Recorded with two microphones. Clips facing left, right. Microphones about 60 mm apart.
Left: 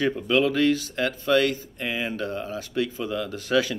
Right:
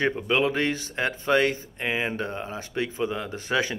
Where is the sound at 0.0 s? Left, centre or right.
Right.